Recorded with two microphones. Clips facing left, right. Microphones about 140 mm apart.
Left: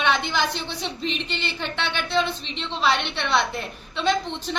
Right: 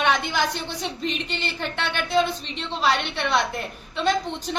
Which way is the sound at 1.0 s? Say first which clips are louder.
Even; 45° right (ahead or behind).